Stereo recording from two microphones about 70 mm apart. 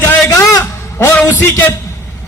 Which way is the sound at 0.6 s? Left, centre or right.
Left.